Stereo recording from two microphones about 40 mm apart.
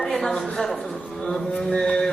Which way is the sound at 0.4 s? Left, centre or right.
Centre.